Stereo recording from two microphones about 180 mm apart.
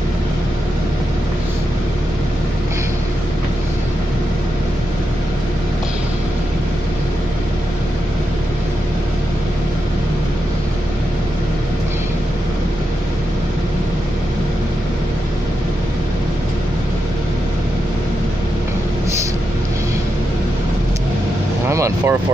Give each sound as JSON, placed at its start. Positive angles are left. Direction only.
{"t": 21.6, "sound": "vehicle", "side_deg": -15}